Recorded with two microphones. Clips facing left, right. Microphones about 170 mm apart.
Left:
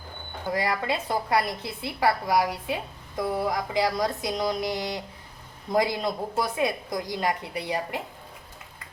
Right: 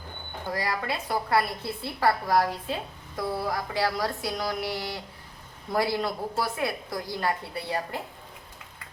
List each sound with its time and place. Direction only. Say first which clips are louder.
0.5 s a woman's voice: left 3 dB; 20° left (ahead or behind)